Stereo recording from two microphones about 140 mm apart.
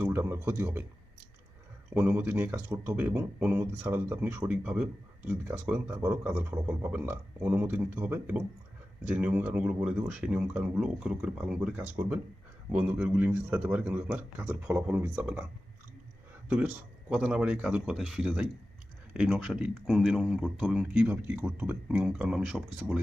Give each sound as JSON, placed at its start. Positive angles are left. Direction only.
{"t": 0.0, "sound": "speech", "side_deg": -15}
{"t": 1.9, "sound": "speech", "side_deg": -10}
{"t": 16.5, "sound": "speech", "side_deg": -10}